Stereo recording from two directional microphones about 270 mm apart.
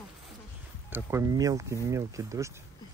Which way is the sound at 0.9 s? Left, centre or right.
Centre.